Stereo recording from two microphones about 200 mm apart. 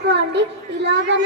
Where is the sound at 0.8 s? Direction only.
60° right (ahead or behind).